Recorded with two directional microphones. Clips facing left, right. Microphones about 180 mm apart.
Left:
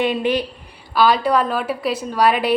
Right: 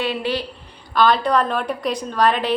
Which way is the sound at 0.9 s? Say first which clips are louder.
Left 1 dB; 10° left (ahead or behind).